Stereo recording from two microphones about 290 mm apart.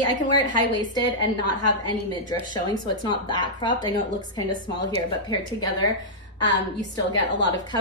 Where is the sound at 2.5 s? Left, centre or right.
Centre.